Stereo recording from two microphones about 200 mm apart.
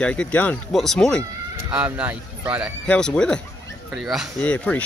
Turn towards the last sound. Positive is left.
turn(degrees=5)  # may be behind; listen again after turning